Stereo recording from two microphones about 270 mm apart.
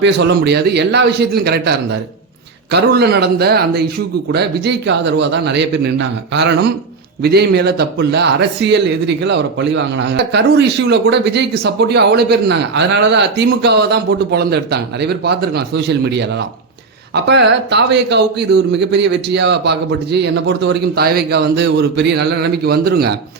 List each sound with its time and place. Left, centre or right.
0.0 s a man's voice: right